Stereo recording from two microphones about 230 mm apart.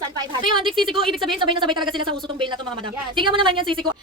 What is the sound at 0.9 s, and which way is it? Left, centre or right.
A woman's voice, right.